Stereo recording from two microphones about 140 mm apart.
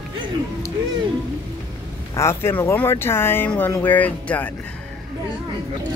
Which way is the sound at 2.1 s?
20° left (ahead or behind).